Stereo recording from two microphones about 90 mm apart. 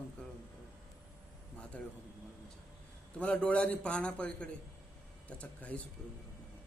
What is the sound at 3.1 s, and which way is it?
A man's voice, 10° left (ahead or behind).